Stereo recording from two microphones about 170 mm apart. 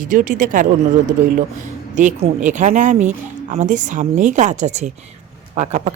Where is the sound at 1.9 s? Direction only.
45° right (ahead or behind).